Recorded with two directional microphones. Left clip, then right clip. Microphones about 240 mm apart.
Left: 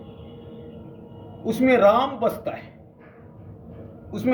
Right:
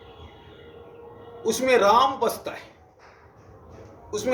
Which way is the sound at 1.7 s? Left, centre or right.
Right.